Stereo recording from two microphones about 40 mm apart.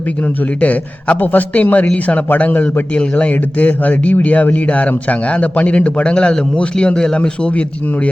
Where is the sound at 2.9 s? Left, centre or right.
Left.